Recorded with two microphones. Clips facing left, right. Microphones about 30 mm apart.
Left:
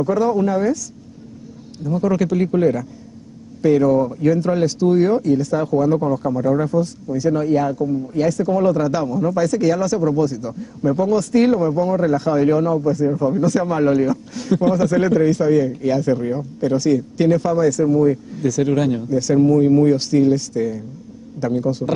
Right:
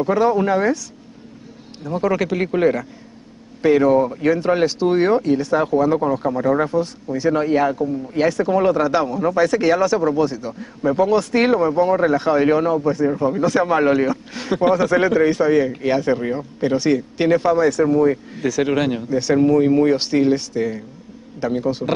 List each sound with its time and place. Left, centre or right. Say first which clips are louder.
0.0 s speech: right 1 dB; right
1.8 s speech: left 1 dB; right